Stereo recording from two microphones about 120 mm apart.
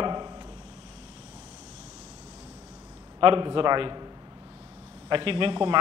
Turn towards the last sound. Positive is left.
turn(degrees=-45)  # may be behind; listen again after turning